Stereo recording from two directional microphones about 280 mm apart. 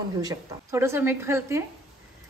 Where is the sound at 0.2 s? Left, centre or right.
Centre.